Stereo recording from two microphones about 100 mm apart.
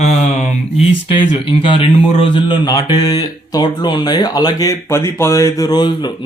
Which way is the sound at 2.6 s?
40° left (ahead or behind).